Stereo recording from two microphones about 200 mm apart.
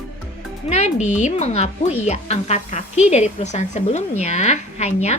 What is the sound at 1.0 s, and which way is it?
A woman's voice, 35° left (ahead or behind).